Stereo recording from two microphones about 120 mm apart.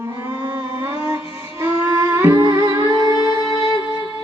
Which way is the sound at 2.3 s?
30° right (ahead or behind).